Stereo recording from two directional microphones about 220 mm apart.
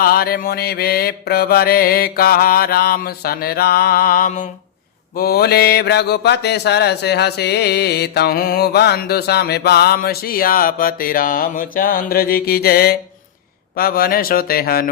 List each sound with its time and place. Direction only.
0.0 s mantra: 45° left (ahead or behind)